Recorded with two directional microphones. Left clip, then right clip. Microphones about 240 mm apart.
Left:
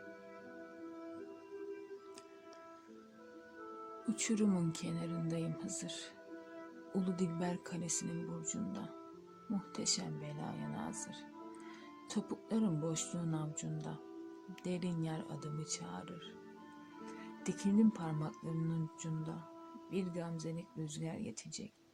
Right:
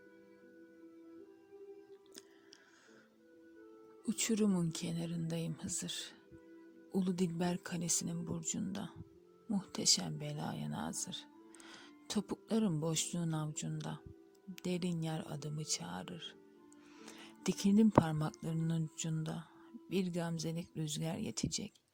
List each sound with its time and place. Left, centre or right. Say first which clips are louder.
4.1 s speech: right 2 dB; right